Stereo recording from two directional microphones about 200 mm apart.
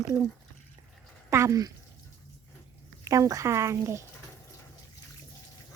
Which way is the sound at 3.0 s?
15° right (ahead or behind).